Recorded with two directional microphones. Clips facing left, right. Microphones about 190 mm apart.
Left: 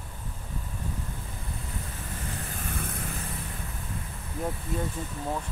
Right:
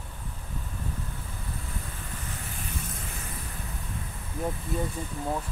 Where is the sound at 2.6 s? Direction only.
55° left (ahead or behind).